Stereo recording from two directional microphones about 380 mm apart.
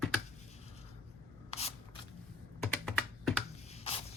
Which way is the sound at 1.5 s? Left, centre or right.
Centre.